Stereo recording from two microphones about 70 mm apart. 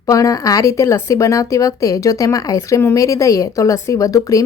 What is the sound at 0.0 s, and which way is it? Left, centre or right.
A woman's voice, left.